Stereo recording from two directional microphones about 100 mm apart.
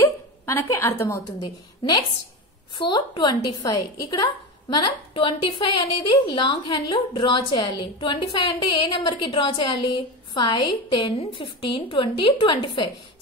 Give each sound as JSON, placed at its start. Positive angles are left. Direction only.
{"t": 0.0, "sound": "a woman's voice", "side_deg": 25}
{"t": 1.4, "sound": "a woman's voice", "side_deg": 45}